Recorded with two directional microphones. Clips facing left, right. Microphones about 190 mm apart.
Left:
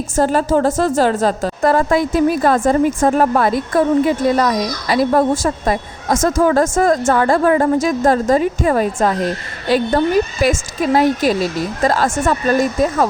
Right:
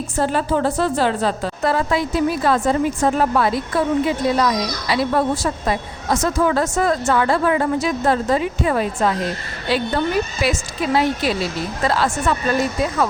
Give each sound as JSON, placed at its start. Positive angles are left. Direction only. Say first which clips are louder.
{"t": 0.2, "sound": "a woman's voice", "louder": "left 5 dB", "side_deg": 40}